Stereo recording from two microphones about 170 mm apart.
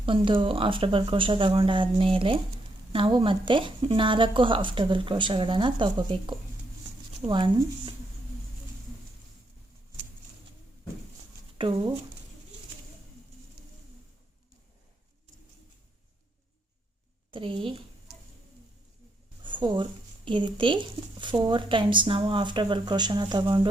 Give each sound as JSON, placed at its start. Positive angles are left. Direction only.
{"t": 0.0, "sound": "speech", "side_deg": -30}
{"t": 11.6, "sound": "speech", "side_deg": -30}
{"t": 13.6, "sound": "a sound", "side_deg": -70}
{"t": 17.3, "sound": "speech", "side_deg": -30}
{"t": 19.4, "sound": "speech", "side_deg": -30}